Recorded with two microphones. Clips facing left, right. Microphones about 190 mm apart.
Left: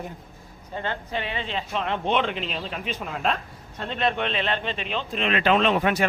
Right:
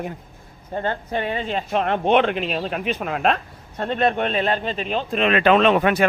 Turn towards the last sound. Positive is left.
turn(degrees=-65)  # may be behind; listen again after turning